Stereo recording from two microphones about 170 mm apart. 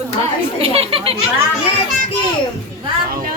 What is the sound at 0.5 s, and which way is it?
Speech, 35° right (ahead or behind).